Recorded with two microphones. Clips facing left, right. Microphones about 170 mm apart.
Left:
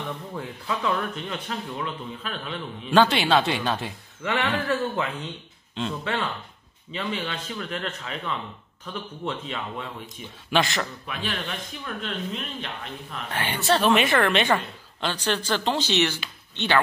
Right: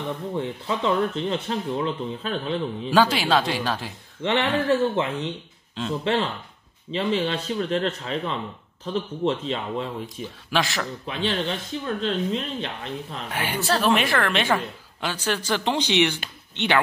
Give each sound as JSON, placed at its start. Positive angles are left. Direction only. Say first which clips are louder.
{"t": 0.3, "sound": "speech", "louder": "right 5 dB", "side_deg": -25}
{"t": 2.9, "sound": "a woman's voice", "louder": "left 1 dB", "side_deg": 0}
{"t": 4.2, "sound": "speech", "louder": "right 4 dB", "side_deg": -25}
{"t": 10.5, "sound": "a woman's voice", "louder": "left 1 dB", "side_deg": 0}
{"t": 11.1, "sound": "speech", "louder": "right 6 dB", "side_deg": -25}
{"t": 13.3, "sound": "speech", "louder": "even", "side_deg": -10}
{"t": 13.6, "sound": "a woman's voice", "louder": "left 1 dB", "side_deg": 0}